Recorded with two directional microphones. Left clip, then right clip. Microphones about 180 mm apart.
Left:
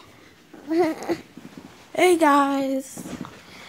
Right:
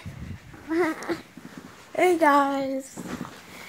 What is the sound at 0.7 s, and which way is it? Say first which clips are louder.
Speech: left 3 dB; 15° left (ahead or behind).